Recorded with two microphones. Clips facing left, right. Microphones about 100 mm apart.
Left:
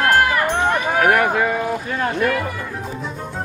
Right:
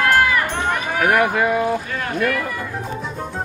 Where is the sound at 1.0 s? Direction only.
Centre (ahead or behind).